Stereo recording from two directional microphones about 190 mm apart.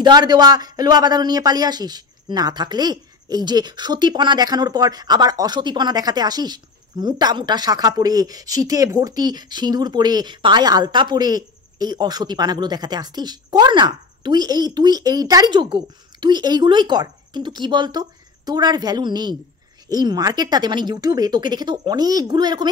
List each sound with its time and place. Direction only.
0.0 s speech: 20° right (ahead or behind)